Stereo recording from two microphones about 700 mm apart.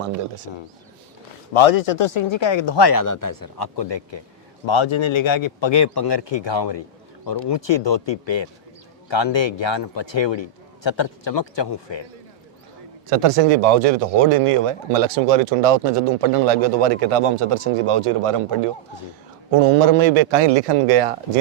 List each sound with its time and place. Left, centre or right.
1.5 s a man's voice: left
13.1 s speech: right